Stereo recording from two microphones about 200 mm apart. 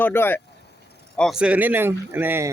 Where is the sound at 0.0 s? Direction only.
10° left (ahead or behind).